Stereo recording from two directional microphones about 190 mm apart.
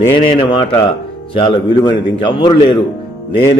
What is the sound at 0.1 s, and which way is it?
A man's voice, 25° left (ahead or behind).